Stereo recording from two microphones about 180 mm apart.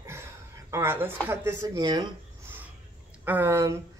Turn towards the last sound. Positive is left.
turn(degrees=-15)  # may be behind; listen again after turning